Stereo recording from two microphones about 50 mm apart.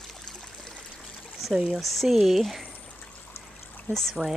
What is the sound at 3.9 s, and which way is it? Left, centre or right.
Speech, left.